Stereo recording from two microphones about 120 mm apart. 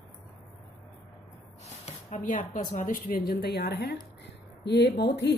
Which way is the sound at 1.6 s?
70° left (ahead or behind).